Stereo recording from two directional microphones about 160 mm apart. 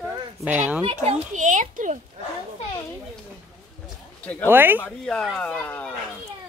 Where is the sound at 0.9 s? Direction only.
40° right (ahead or behind).